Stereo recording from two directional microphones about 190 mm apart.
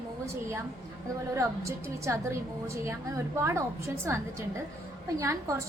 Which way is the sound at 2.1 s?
15° right (ahead or behind).